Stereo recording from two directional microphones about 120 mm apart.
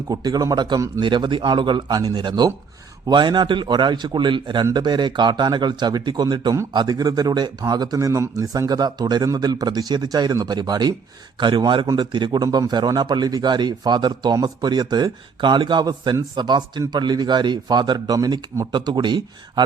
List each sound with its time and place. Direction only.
0.1 s a man's voice: 35° right (ahead or behind)